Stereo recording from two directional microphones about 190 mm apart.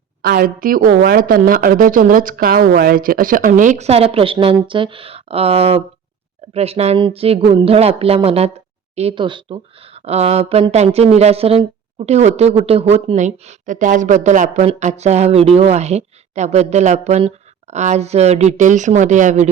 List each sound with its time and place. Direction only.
0.2 s speech: 50° right (ahead or behind)